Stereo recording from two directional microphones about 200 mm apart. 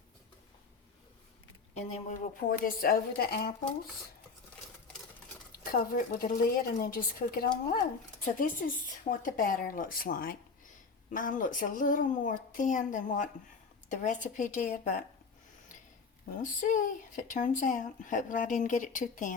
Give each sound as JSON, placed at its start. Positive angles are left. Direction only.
{"t": 1.7, "sound": "a woman's voice", "side_deg": 40}
{"t": 5.5, "sound": "a woman's voice", "side_deg": 45}
{"t": 16.4, "sound": "speech", "side_deg": 40}